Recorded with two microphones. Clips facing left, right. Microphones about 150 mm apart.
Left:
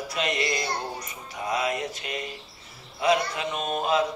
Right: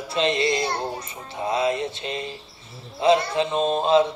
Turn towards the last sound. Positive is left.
turn(degrees=-25)  # may be behind; listen again after turning